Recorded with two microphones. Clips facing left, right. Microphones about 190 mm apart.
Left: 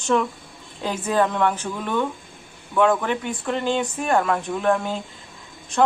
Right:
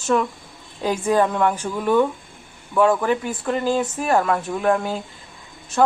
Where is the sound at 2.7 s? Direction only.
5° right (ahead or behind).